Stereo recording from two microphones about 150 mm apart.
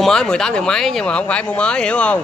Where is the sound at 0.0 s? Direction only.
5° left (ahead or behind).